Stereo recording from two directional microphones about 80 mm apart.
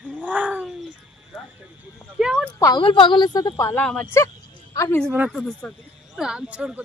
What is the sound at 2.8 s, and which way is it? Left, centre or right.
Speech, left.